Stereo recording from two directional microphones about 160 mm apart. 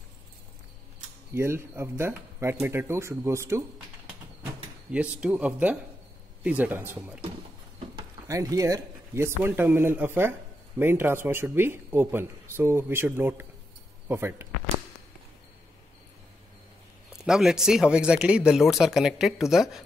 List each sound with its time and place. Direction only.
1.3 s speech: 15° right (ahead or behind)
4.9 s speech: 5° right (ahead or behind)
8.3 s speech: 20° right (ahead or behind)
17.2 s speech: centre (ahead or behind)